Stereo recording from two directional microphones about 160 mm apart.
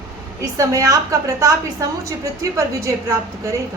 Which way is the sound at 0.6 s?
20° right (ahead or behind).